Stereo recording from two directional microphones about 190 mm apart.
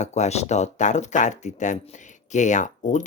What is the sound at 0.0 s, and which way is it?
Speech, 35° left (ahead or behind).